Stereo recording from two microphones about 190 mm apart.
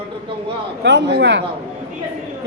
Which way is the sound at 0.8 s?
65° right (ahead or behind).